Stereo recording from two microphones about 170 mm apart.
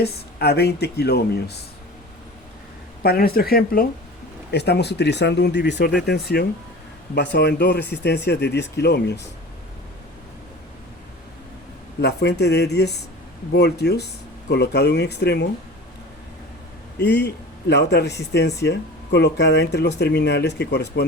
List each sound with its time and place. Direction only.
0.0 s speech: 70° left (ahead or behind)
3.0 s speech: 65° left (ahead or behind)
4.5 s speech: 75° left (ahead or behind)
7.2 s speech: 80° left
11.9 s speech: 75° left (ahead or behind)
17.0 s speech: 85° left